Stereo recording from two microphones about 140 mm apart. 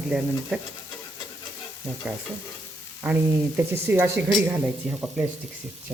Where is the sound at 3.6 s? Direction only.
20° right (ahead or behind).